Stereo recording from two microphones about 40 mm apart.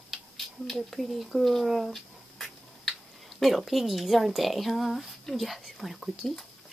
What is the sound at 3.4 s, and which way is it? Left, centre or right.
Speech, centre.